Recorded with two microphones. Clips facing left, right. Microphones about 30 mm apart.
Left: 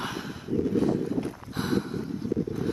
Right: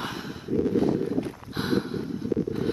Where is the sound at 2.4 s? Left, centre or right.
Right.